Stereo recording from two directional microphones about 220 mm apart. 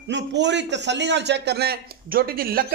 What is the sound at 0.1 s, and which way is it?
A man's voice, 55° right (ahead or behind).